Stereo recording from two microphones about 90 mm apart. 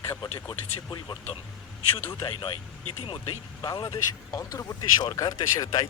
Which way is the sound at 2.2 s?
75° left (ahead or behind).